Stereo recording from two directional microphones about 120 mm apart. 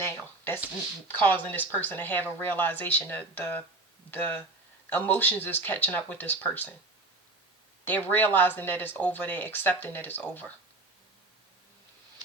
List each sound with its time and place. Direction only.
0.0 s a sound: 20° left (ahead or behind)
1.2 s speech: 15° left (ahead or behind)
7.9 s speech: 15° left (ahead or behind)